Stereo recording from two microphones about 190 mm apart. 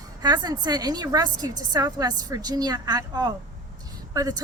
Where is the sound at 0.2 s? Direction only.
20° right (ahead or behind).